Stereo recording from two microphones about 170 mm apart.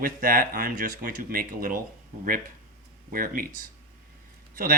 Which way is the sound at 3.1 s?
55° right (ahead or behind).